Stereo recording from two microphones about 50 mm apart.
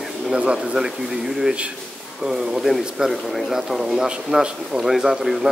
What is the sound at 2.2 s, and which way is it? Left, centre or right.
Speech, centre.